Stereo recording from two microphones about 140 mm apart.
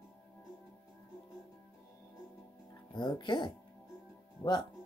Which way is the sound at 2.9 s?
35° left (ahead or behind).